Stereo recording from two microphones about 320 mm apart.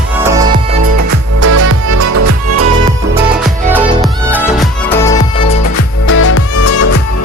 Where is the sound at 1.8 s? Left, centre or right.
Right.